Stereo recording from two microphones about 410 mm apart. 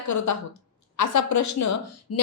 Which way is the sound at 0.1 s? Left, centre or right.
Left.